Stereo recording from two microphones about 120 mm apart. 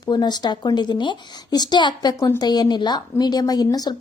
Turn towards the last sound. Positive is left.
turn(degrees=30)  # may be behind; listen again after turning